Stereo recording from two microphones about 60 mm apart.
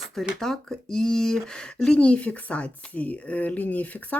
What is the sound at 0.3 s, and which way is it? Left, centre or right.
Speech, centre.